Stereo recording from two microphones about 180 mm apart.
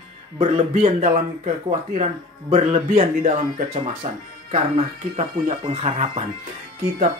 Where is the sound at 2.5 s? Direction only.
40° right (ahead or behind).